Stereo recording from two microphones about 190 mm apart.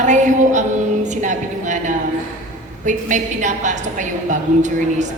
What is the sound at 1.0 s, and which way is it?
A woman's voice, 40° right (ahead or behind).